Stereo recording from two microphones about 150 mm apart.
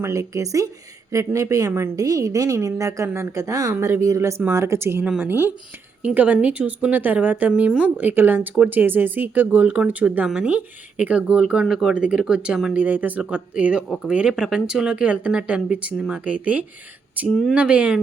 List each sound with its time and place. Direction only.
0.0 s a woman's voice: 20° right (ahead or behind)